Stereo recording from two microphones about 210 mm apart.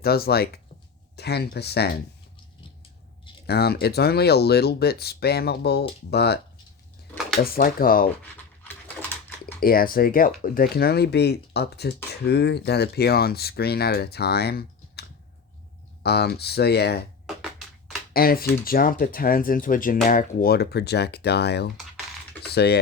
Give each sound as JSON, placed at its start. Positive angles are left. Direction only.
{"t": 0.0, "sound": "speech", "side_deg": 45}
{"t": 3.4, "sound": "speech", "side_deg": 50}
{"t": 7.4, "sound": "speech", "side_deg": 45}
{"t": 8.6, "sound": "a sound", "side_deg": 10}
{"t": 9.6, "sound": "speech", "side_deg": 45}
{"t": 16.0, "sound": "speech", "side_deg": 50}
{"t": 18.1, "sound": "speech", "side_deg": 45}